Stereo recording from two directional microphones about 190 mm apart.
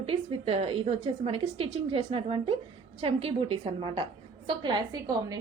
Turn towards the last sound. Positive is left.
turn(degrees=-20)  # may be behind; listen again after turning